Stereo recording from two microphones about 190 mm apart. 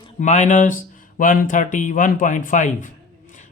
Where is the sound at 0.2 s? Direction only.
40° left (ahead or behind).